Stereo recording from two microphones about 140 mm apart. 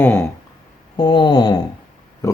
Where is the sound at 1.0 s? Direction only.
30° left (ahead or behind).